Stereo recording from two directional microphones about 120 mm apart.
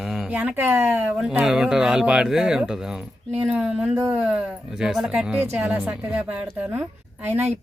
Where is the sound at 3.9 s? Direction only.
20° right (ahead or behind).